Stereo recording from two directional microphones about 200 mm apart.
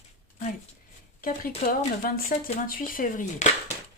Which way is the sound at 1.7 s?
45° left (ahead or behind).